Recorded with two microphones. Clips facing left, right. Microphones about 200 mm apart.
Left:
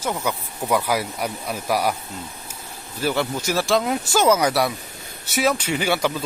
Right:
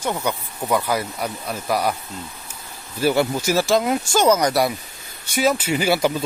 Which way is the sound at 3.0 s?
10° right (ahead or behind).